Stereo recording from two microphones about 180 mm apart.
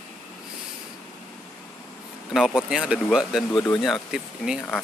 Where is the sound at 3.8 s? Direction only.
Centre (ahead or behind).